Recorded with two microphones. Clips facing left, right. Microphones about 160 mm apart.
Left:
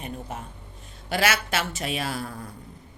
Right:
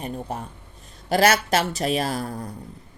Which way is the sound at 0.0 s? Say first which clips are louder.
Right 5 dB; 35° right (ahead or behind).